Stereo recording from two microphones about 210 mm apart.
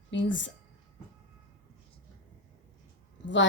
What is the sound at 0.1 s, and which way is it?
Speech, 60° left (ahead or behind).